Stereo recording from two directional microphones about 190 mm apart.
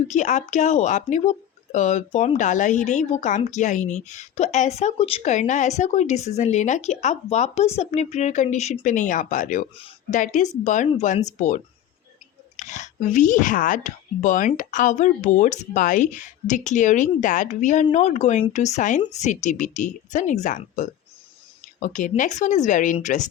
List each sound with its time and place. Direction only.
0.1 s speech: 40° left (ahead or behind)
9.7 s speech: 30° left (ahead or behind)
10.2 s speech: 40° left (ahead or behind)